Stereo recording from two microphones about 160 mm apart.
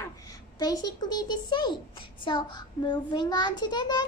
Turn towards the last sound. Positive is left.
turn(degrees=25)  # may be behind; listen again after turning